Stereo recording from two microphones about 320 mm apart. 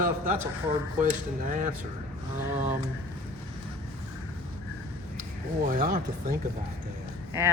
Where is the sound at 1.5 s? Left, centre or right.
Right.